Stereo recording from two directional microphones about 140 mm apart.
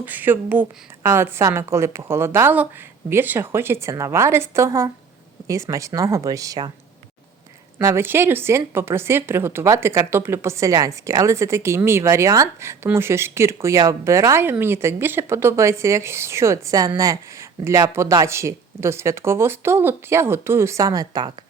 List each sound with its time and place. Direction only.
0.0 s a woman's voice: 15° right (ahead or behind)
7.8 s a woman's voice: 20° right (ahead or behind)